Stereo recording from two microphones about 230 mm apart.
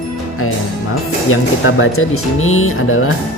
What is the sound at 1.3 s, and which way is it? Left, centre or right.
Speech, left.